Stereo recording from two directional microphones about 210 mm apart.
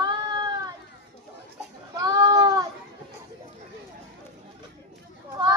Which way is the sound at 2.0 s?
20° right (ahead or behind).